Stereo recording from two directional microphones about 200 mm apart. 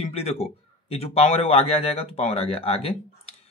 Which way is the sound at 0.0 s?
30° left (ahead or behind).